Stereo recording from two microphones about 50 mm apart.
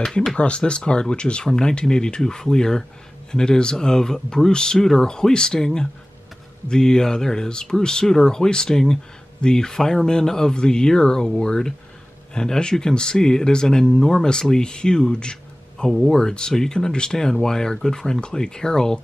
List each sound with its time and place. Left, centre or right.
0.0 s speech: centre
0.4 s speech: left
15.9 s speech: centre
16.2 s speech: centre